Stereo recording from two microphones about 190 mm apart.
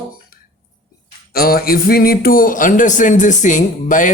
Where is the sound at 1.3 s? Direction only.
50° left (ahead or behind).